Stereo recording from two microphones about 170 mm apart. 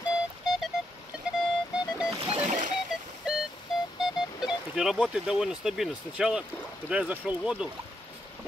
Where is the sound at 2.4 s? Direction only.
45° right (ahead or behind).